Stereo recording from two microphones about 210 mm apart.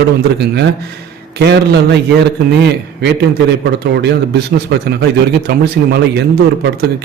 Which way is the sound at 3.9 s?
50° right (ahead or behind).